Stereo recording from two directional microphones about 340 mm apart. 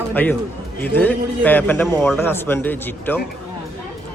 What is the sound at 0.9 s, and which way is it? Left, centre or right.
A man's voice, centre.